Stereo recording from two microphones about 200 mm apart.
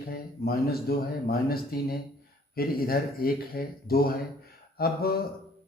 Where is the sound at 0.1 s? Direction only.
50° left (ahead or behind).